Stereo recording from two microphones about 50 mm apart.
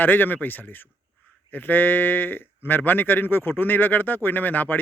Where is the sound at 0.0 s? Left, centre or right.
Left.